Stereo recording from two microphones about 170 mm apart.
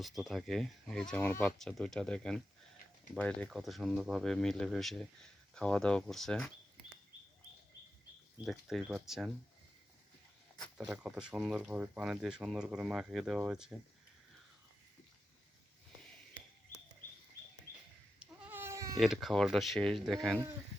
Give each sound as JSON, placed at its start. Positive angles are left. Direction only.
{"t": 0.2, "sound": "speech", "side_deg": 0}
{"t": 8.4, "sound": "speech", "side_deg": 0}
{"t": 10.6, "sound": "speech", "side_deg": -5}
{"t": 18.2, "sound": "goat", "side_deg": -10}
{"t": 18.9, "sound": "speech", "side_deg": 0}